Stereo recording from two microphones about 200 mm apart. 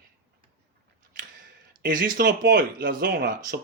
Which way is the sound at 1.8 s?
45° right (ahead or behind).